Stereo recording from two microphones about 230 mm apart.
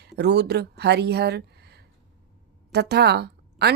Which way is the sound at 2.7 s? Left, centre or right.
Right.